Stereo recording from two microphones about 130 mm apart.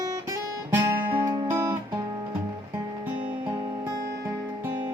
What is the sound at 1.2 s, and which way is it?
Music, 30° right (ahead or behind).